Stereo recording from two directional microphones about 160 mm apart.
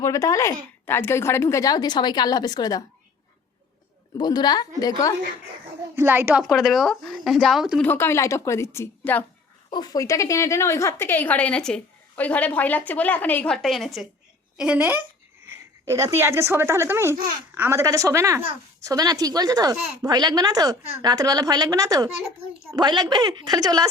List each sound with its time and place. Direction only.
0.0 s a woman's voice: 20° left (ahead or behind)
4.2 s a woman's voice: 25° left (ahead or behind)
6.0 s a woman's voice: 15° right (ahead or behind)
6.5 s speech: centre (ahead or behind)
7.8 s a woman's voice: 15° left (ahead or behind)
9.6 s a woman's voice: 25° left (ahead or behind); by 23.9 s 25° right (ahead or behind)